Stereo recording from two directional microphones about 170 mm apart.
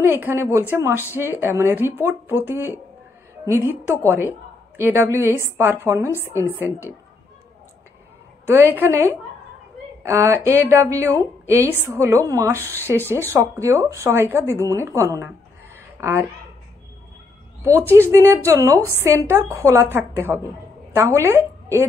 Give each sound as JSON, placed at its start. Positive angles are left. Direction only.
{"t": 0.0, "sound": "speech", "side_deg": -10}
{"t": 6.1, "sound": "speech", "side_deg": 15}
{"t": 8.5, "sound": "speech", "side_deg": -15}
{"t": 18.1, "sound": "a woman's voice", "side_deg": -15}